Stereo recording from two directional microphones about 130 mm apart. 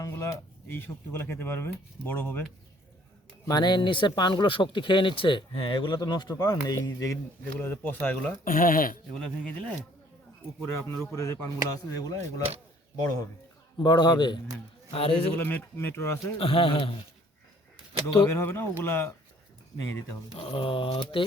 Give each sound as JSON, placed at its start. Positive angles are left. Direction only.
{"t": 0.0, "sound": "speech", "side_deg": 25}
{"t": 3.4, "sound": "speech", "side_deg": 35}
{"t": 7.6, "sound": "speech", "side_deg": 15}
{"t": 8.4, "sound": "speech", "side_deg": 90}
{"t": 9.1, "sound": "speech", "side_deg": 5}
{"t": 10.6, "sound": "speech", "side_deg": 20}
{"t": 13.7, "sound": "a man's voice", "side_deg": 35}
{"t": 15.4, "sound": "speech", "side_deg": 15}
{"t": 16.4, "sound": "mantra", "side_deg": 45}
{"t": 18.2, "sound": "speech", "side_deg": 20}
{"t": 20.3, "sound": "mantra", "side_deg": 45}